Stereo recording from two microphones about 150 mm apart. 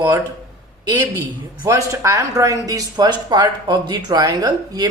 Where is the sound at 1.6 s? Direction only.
20° right (ahead or behind).